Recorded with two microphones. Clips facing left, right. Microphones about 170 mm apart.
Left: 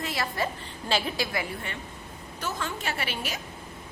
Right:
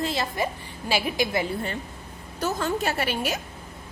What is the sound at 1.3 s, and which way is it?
A woman's voice, 35° right (ahead or behind).